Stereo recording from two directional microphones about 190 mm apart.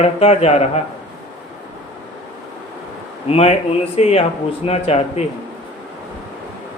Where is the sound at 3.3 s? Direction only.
30° left (ahead or behind).